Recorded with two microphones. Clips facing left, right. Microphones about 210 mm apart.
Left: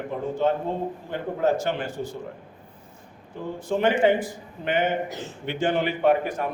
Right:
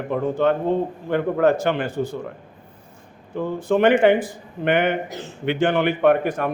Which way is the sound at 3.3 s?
65° right (ahead or behind).